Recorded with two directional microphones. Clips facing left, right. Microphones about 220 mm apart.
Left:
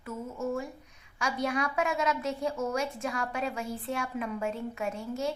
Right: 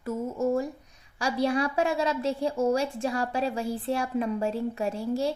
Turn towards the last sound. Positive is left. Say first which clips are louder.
# right 5 dB
turn(degrees=-35)  # may be behind; listen again after turning